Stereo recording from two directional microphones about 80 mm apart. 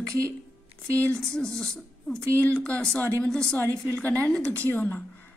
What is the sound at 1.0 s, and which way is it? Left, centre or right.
A woman's voice, centre.